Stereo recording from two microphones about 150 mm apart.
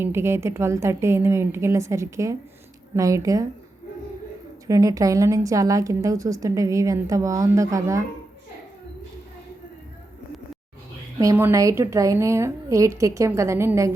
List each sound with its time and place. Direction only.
0.0 s a woman's voice: 15° right (ahead or behind)
4.6 s a woman's voice: 20° right (ahead or behind)
11.2 s a woman's voice: 20° right (ahead or behind)